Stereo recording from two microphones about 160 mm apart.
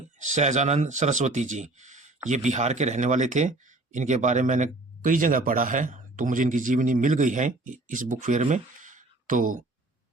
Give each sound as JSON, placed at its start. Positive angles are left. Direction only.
{"t": 0.2, "sound": "a man's voice", "side_deg": -50}